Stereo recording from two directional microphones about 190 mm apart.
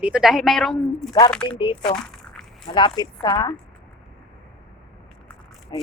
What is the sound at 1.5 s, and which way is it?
Speech, 25° left (ahead or behind).